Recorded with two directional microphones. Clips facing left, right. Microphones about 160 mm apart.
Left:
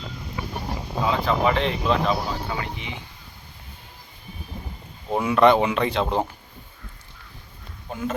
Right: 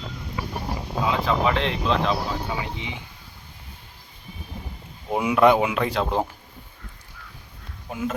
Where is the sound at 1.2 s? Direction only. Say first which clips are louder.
Left 2 dB; centre (ahead or behind).